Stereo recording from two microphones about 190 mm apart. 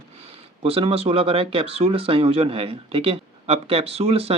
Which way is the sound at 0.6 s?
30° right (ahead or behind).